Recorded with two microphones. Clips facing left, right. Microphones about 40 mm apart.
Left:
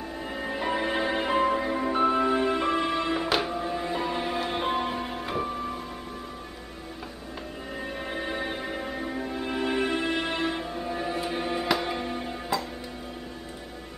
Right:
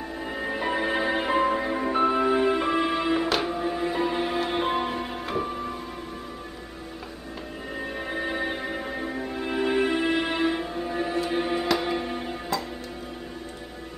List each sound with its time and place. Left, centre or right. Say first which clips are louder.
0.2 s music: right 2 dB; centre
7.8 s music: right 3 dB; centre